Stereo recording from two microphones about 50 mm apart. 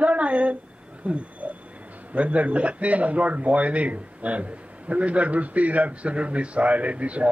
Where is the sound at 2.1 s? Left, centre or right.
Right.